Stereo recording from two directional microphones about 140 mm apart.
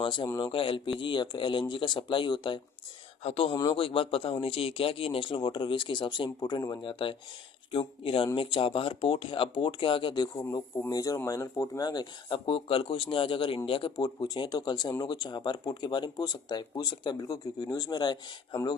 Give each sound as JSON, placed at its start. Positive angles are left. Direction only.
{"t": 0.0, "sound": "a man's voice", "side_deg": 35}
{"t": 12.3, "sound": "speech", "side_deg": 40}